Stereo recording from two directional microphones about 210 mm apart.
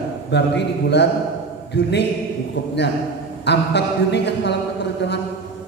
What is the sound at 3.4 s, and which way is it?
A man's voice, 55° left (ahead or behind).